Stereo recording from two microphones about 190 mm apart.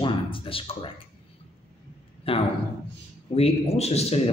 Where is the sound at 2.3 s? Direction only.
30° left (ahead or behind).